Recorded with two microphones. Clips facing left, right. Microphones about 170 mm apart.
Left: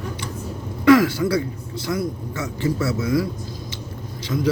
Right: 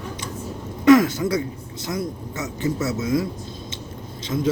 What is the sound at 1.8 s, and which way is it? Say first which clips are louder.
Speech: left 2 dB; 20° right (ahead or behind).